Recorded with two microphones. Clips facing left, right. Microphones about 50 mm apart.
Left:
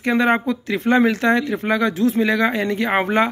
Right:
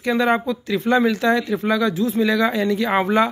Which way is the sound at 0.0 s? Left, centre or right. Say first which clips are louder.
Left 1 dB; left.